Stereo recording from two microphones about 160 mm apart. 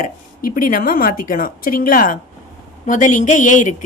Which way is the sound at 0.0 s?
60° left (ahead or behind).